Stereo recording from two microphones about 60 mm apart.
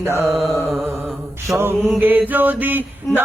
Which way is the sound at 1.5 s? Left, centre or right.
Right.